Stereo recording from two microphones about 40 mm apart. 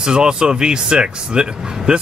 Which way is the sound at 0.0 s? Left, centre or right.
Right.